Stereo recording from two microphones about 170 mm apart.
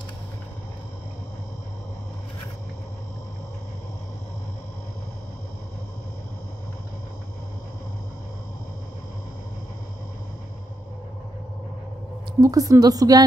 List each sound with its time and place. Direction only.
12.4 s a woman's voice: 20° right (ahead or behind)